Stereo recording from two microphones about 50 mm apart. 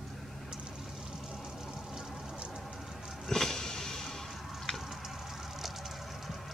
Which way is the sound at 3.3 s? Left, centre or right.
Centre.